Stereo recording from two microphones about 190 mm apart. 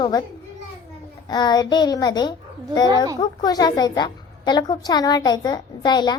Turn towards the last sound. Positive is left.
turn(degrees=20)  # may be behind; listen again after turning